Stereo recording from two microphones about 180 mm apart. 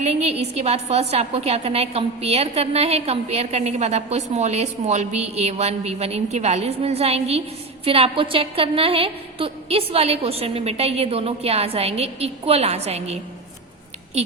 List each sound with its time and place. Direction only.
0.1 s a woman's voice: 35° right (ahead or behind)